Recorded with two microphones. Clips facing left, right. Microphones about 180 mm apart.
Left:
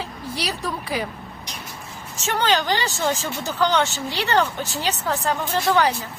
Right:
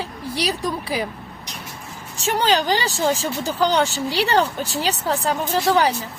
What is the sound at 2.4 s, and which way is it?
Speech, 35° right (ahead or behind).